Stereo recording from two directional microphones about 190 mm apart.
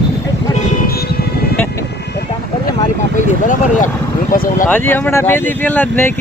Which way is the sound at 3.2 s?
40° left (ahead or behind).